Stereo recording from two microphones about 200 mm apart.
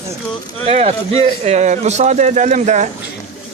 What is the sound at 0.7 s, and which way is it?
Speech, 30° right (ahead or behind).